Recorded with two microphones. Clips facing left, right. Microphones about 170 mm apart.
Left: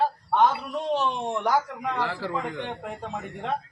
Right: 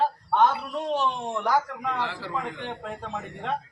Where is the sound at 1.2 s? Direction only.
15° left (ahead or behind).